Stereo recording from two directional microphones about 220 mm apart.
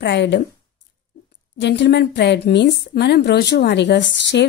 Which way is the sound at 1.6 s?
55° left (ahead or behind).